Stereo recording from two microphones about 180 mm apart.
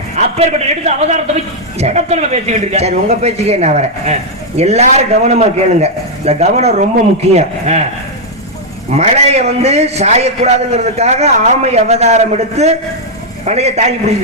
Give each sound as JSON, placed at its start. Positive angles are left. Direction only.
{"t": 0.2, "sound": "a man's voice", "side_deg": -35}
{"t": 8.9, "sound": "a man's voice", "side_deg": -35}